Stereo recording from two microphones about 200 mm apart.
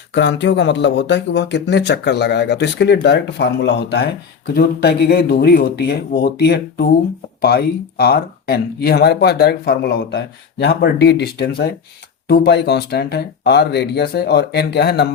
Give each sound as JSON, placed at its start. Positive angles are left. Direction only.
{"t": 0.1, "sound": "speech", "side_deg": 60}